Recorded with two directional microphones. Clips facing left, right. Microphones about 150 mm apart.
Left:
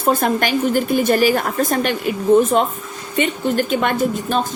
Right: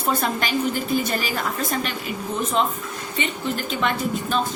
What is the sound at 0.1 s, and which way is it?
A woman's voice, 50° left (ahead or behind).